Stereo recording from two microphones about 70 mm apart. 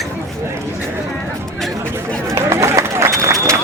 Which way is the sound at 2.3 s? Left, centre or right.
Right.